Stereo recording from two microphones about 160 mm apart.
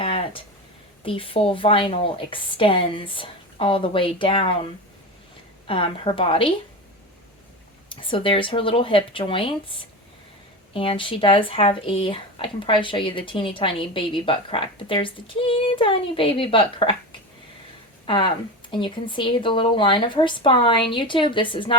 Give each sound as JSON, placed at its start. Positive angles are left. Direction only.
{"t": 0.0, "sound": "a sound", "side_deg": 35}
{"t": 1.0, "sound": "speech", "side_deg": 35}
{"t": 5.6, "sound": "speech", "side_deg": 35}
{"t": 7.9, "sound": "speech", "side_deg": 35}
{"t": 18.0, "sound": "speech", "side_deg": 30}